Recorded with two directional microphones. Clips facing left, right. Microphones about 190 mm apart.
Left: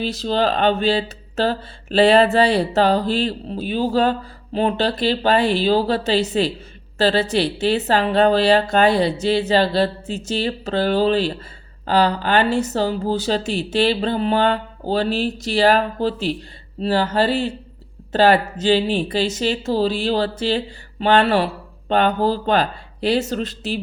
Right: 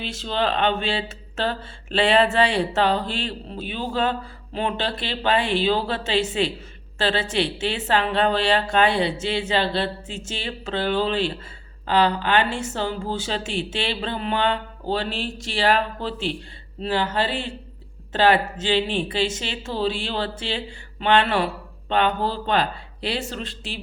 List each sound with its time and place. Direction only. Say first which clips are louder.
0.0 s speech: left 5 dB; 40° left (ahead or behind)